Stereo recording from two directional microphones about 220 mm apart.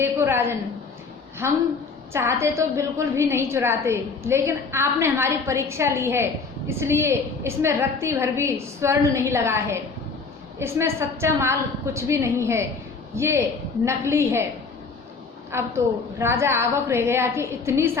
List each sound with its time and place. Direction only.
0.0 s a woman's voice: 10° right (ahead or behind)
15.5 s a woman's voice: 10° right (ahead or behind)